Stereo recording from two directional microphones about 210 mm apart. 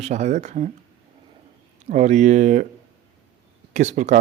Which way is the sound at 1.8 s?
35° right (ahead or behind).